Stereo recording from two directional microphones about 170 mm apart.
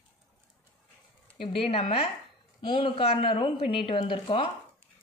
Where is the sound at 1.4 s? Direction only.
35° left (ahead or behind).